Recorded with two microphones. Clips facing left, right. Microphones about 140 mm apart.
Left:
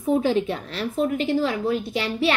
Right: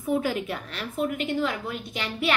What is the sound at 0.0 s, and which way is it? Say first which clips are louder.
A woman's voice: left 5 dB; 25° left (ahead or behind).